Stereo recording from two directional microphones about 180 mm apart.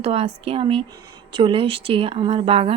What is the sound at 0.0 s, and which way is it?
Speech, 35° right (ahead or behind).